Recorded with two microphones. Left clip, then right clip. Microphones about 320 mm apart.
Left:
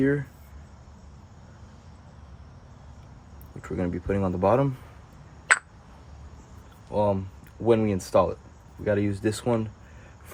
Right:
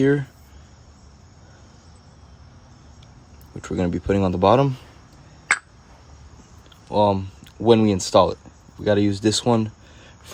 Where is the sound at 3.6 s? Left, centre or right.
Right.